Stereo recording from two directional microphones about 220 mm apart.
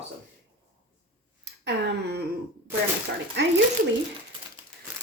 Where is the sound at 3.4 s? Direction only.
55° right (ahead or behind).